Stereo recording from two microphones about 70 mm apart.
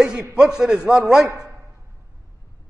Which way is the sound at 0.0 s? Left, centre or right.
Centre.